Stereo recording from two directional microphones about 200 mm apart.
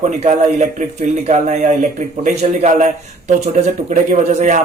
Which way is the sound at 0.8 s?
35° right (ahead or behind).